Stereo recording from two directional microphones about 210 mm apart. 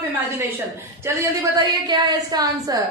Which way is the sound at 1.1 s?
15° right (ahead or behind).